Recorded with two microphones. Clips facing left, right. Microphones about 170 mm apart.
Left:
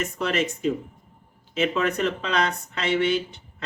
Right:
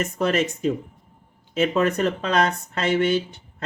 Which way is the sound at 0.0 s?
45° right (ahead or behind).